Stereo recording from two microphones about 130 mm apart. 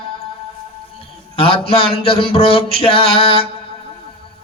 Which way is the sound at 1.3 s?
45° left (ahead or behind).